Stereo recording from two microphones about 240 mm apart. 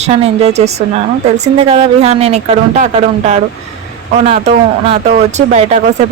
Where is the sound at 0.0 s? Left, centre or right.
Right.